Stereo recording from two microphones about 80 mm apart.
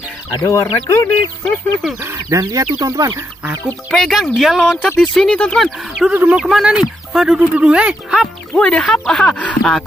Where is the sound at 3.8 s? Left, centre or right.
Centre.